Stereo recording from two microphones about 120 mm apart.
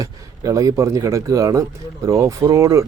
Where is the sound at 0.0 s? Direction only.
30° right (ahead or behind).